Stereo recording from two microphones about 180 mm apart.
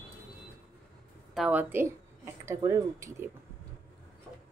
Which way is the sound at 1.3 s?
5° right (ahead or behind).